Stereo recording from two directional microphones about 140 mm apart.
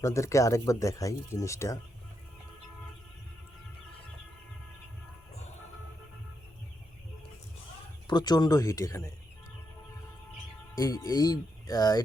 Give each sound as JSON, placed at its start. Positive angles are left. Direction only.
{"t": 0.0, "sound": "speech", "side_deg": 20}
{"t": 8.0, "sound": "speech", "side_deg": 30}
{"t": 10.8, "sound": "speech", "side_deg": 25}